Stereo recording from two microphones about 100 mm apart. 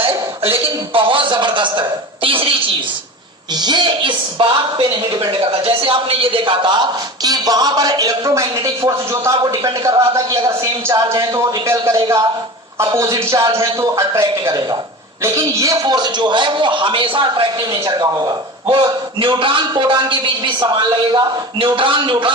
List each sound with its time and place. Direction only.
0.6 s a man's voice: 60° right (ahead or behind)
3.5 s a man's voice: 45° right (ahead or behind)
5.4 s a man's voice: 65° right (ahead or behind); by 18.8 s 45° right (ahead or behind)
19.2 s a man's voice: 55° right (ahead or behind)